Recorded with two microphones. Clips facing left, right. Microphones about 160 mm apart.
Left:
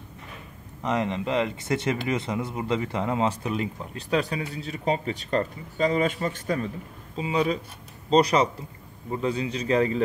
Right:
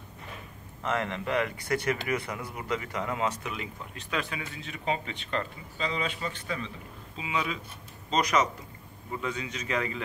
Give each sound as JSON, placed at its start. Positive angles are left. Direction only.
{"t": 0.8, "sound": "speech", "side_deg": 20}